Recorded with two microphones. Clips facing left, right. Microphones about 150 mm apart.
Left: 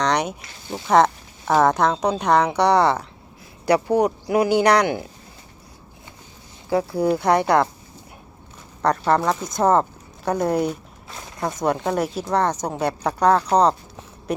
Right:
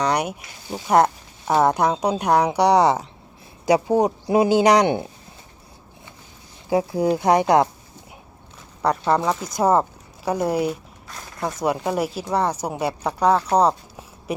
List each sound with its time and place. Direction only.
0.0 s speech: 10° right (ahead or behind)
6.7 s speech: 15° right (ahead or behind)
8.8 s speech: 5° right (ahead or behind)
14.3 s a sound: 5° right (ahead or behind)